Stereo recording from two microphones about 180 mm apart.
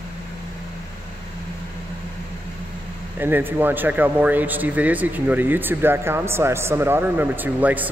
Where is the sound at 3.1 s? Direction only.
10° right (ahead or behind).